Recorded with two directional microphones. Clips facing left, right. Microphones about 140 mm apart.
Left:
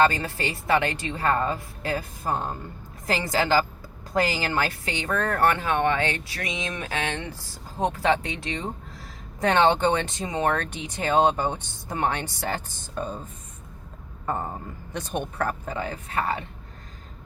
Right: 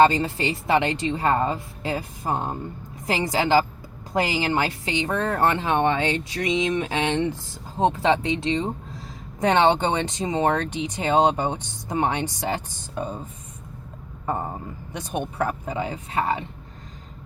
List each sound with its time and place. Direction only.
0.0 s speech: 20° right (ahead or behind)
14.3 s speech: 15° right (ahead or behind)